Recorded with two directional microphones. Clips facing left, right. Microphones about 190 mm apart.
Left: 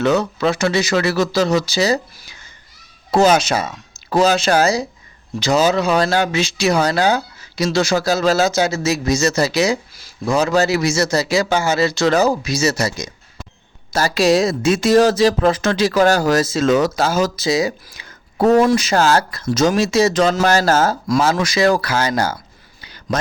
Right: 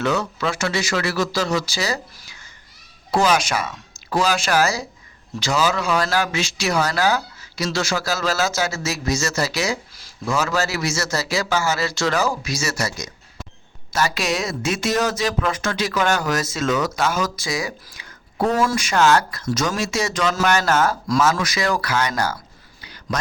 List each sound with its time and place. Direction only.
0.0 s speech: 20° left (ahead or behind)
13.9 s speech: 35° left (ahead or behind)